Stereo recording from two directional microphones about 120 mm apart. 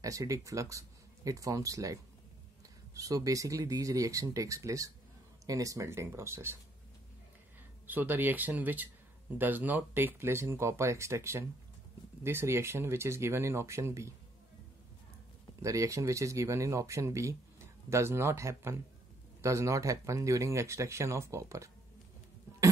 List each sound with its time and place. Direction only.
0.0 s speech: 30° right (ahead or behind)
7.8 s speech: 15° right (ahead or behind)
15.6 s speech: 25° right (ahead or behind)